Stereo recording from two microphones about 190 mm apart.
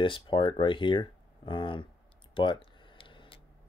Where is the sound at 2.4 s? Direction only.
25° left (ahead or behind).